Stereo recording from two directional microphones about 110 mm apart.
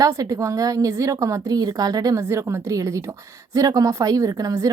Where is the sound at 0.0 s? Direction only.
30° right (ahead or behind).